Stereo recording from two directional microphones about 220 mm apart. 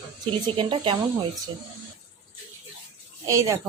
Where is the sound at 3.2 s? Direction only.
15° right (ahead or behind).